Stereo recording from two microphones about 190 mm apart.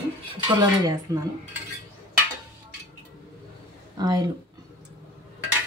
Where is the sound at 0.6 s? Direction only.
20° right (ahead or behind).